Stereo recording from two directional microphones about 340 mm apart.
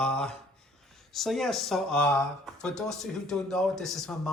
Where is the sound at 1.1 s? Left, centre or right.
Centre.